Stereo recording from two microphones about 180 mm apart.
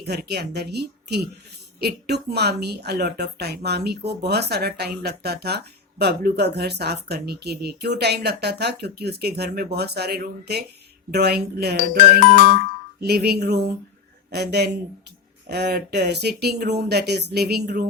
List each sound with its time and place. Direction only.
0.0 s speech: 65° right (ahead or behind)
13.0 s speech: 60° right (ahead or behind)